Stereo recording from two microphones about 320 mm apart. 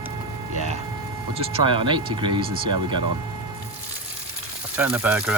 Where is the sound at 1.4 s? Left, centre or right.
Centre.